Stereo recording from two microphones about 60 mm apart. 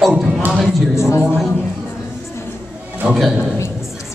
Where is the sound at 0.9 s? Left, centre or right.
Left.